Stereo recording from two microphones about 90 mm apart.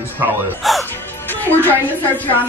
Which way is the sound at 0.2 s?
20° right (ahead or behind).